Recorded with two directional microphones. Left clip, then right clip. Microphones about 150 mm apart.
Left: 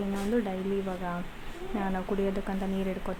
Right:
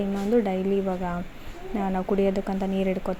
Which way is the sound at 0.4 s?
25° right (ahead or behind).